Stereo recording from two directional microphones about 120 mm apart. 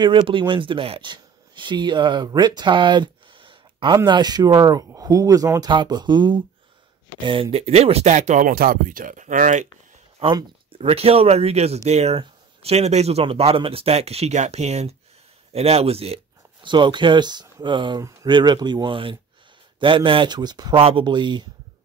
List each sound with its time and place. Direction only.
0.0 s speech: 45° right (ahead or behind)
7.5 s speech: 60° right (ahead or behind); by 9.7 s 90° right
10.8 s speech: 55° right (ahead or behind)
16.6 s speech: 40° right (ahead or behind)